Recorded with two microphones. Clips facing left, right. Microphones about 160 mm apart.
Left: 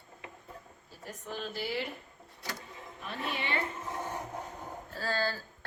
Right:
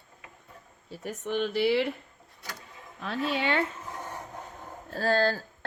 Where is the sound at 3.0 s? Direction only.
90° right.